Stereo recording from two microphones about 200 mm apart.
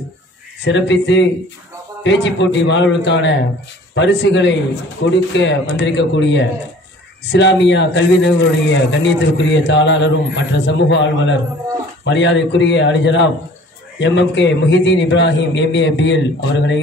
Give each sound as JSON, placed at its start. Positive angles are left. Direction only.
{"t": 0.7, "sound": "speech", "side_deg": 65}